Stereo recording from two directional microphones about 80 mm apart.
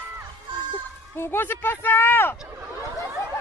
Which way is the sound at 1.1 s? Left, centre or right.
Left.